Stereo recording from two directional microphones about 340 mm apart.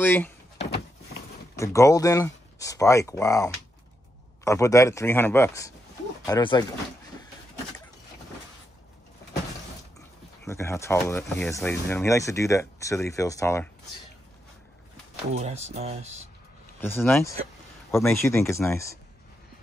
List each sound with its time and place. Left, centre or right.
0.0 s speech: centre
1.6 s speech: centre
9.9 s speech: centre
15.3 s speech: centre
16.8 s speech: centre